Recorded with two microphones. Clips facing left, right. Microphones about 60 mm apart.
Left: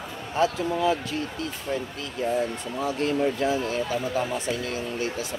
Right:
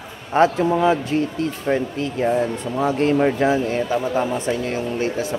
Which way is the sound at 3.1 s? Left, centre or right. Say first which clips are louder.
Right 6 dB; right.